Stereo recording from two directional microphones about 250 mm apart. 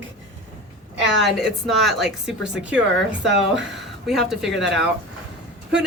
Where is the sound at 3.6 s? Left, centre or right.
Right.